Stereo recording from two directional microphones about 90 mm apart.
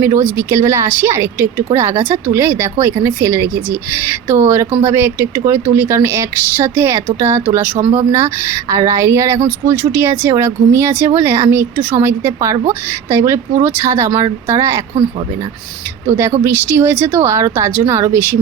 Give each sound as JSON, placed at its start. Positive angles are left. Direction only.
{"t": 0.0, "sound": "speech", "side_deg": -25}
{"t": 16.0, "sound": "speech", "side_deg": -30}